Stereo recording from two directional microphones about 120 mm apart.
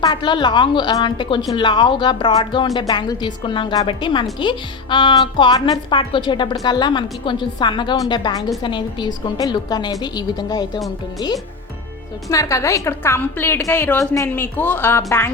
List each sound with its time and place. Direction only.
0.0 s a woman's voice: 40° left (ahead or behind)
5.9 s a woman's voice: 40° left (ahead or behind)
12.3 s a woman's voice: 25° left (ahead or behind)